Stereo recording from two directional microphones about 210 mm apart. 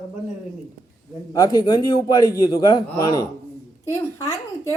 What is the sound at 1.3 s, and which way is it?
A man's voice, 20° left (ahead or behind).